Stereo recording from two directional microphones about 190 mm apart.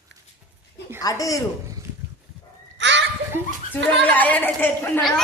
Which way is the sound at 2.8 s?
70° right (ahead or behind).